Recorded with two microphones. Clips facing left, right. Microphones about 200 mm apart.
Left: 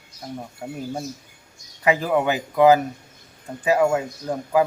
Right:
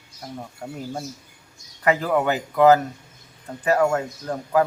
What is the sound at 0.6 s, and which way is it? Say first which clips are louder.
Speech: left 1 dB; 10° left (ahead or behind).